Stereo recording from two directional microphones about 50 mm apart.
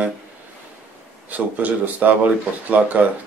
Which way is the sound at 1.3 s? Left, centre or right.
Right.